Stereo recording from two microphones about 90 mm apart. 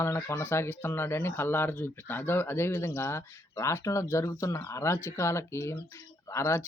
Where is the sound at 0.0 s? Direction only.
30° left (ahead or behind).